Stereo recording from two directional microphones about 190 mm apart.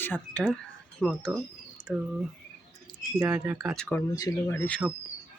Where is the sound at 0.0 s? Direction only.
10° left (ahead or behind).